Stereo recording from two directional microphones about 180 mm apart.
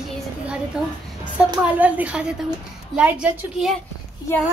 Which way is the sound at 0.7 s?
5° right (ahead or behind).